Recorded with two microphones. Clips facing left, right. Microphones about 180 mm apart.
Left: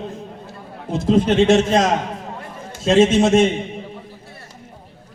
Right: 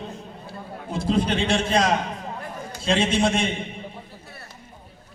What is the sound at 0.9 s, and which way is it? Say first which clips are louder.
A man's voice: left 7 dB; 45° left (ahead or behind).